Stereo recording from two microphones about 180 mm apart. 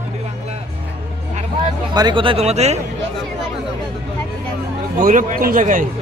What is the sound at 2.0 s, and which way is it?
Speech, 25° right (ahead or behind).